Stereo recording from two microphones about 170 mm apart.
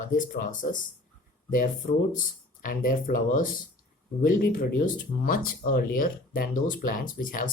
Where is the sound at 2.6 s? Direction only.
50° left (ahead or behind).